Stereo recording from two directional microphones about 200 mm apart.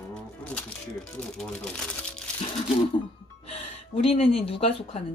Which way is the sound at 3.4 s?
30° left (ahead or behind).